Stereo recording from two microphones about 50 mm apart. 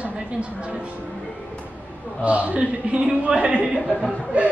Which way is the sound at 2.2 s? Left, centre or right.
Right.